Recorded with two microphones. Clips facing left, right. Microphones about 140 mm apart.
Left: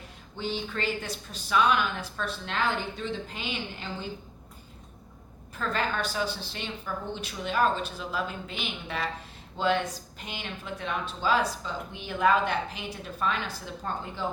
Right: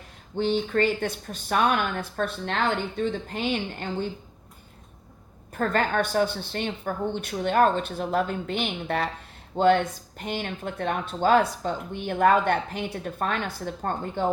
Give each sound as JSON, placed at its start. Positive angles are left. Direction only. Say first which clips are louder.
{"t": 0.3, "sound": "speech", "louder": "right 9 dB", "side_deg": -50}
{"t": 5.5, "sound": "speech", "louder": "right 6 dB", "side_deg": -55}